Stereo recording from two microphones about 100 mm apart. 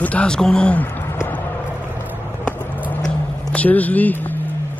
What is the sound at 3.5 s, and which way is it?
Speech, 15° left (ahead or behind).